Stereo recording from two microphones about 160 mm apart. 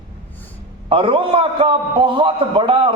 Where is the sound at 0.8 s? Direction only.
35° right (ahead or behind).